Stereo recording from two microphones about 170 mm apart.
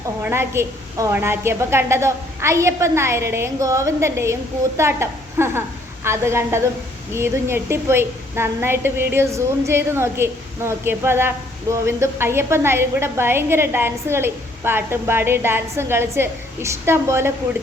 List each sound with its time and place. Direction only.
0.2 s a woman's voice: 15° right (ahead or behind)